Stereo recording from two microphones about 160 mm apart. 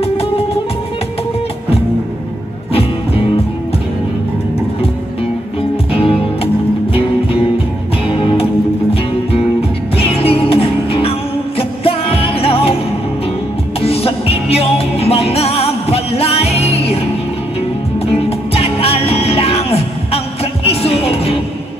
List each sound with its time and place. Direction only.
0.0 s music: 40° left (ahead or behind)
2.7 s music: 35° left (ahead or behind)
5.6 s music: 35° left (ahead or behind)